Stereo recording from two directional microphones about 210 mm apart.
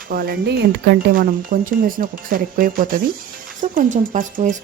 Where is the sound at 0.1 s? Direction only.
45° right (ahead or behind).